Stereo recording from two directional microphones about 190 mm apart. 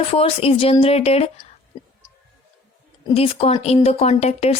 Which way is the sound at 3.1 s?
30° left (ahead or behind).